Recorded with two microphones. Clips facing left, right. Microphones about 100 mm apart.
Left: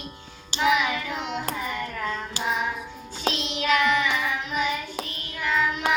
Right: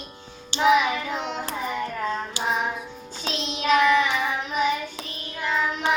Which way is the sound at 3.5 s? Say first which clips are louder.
Right 4 dB; 20° right (ahead or behind).